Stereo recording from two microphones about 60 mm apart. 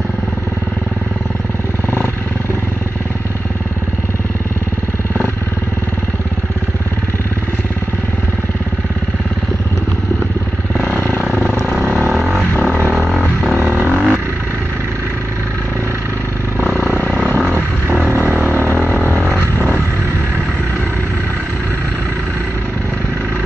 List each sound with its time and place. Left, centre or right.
10.8 s vehicle: left
12.9 s a sound: centre
13.7 s vehicle: right
16.5 s vehicle: right